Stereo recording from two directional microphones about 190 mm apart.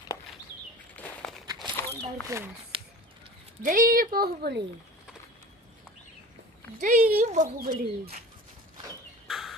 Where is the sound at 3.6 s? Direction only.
45° right (ahead or behind).